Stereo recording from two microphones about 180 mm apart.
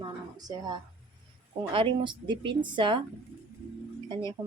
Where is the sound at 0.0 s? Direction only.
20° right (ahead or behind).